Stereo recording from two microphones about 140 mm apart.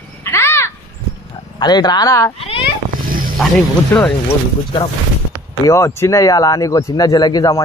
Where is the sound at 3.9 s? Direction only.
15° left (ahead or behind).